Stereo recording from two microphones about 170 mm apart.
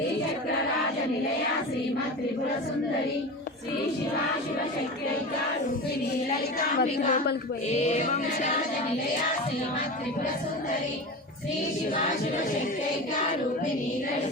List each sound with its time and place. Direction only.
6.7 s speech: 55° left (ahead or behind)